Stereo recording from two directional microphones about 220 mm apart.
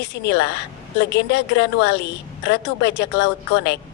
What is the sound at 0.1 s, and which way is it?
A woman's voice, 50° left (ahead or behind).